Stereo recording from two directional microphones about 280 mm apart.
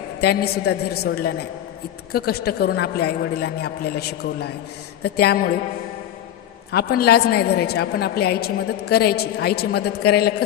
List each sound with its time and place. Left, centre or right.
0.2 s a woman's voice: left
6.7 s a woman's voice: left